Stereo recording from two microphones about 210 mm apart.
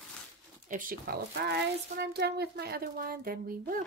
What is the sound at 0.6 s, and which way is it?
Speech, 40° right (ahead or behind).